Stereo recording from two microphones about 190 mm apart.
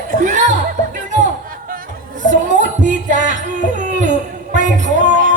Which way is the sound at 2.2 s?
40° right (ahead or behind).